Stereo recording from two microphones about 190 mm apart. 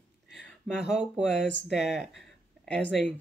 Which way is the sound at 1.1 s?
Centre (ahead or behind).